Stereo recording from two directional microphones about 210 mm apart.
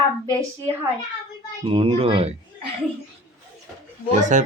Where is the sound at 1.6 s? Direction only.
25° right (ahead or behind).